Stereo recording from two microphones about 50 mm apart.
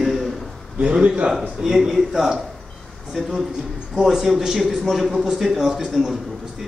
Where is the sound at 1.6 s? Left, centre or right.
Centre.